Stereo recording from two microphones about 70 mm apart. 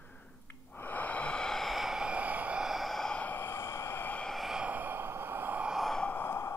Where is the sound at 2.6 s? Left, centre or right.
Centre.